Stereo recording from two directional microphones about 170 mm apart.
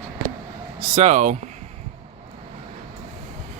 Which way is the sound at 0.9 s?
45° right (ahead or behind).